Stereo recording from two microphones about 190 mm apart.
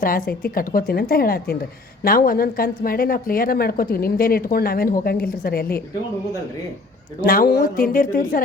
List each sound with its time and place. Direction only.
0.0 s a woman's voice: 50° left (ahead or behind)
7.3 s a woman's voice: 50° left (ahead or behind)